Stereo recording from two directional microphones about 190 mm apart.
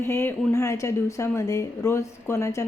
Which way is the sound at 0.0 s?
15° left (ahead or behind).